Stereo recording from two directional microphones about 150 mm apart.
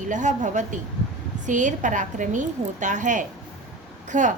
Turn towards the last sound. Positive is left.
turn(degrees=-55)  # may be behind; listen again after turning